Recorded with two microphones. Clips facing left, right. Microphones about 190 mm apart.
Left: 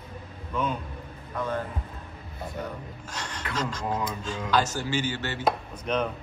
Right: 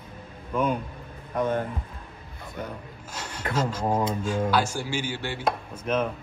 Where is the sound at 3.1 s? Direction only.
10° right (ahead or behind).